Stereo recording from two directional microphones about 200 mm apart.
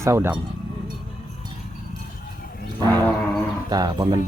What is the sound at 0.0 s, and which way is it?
Cattle, 15° right (ahead or behind).